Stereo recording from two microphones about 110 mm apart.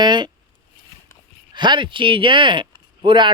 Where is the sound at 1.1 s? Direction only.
30° left (ahead or behind).